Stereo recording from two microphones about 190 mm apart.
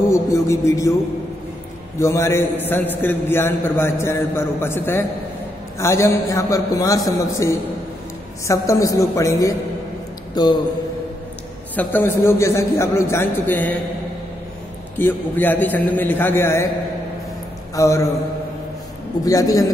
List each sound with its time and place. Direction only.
0.1 s music: 15° left (ahead or behind)
2.0 s a man's voice: 15° left (ahead or behind)
11.7 s a man's voice: 10° left (ahead or behind)
15.0 s a man's voice: 10° left (ahead or behind)
17.7 s a man's voice: 15° left (ahead or behind)
19.2 s a man's voice: 20° left (ahead or behind)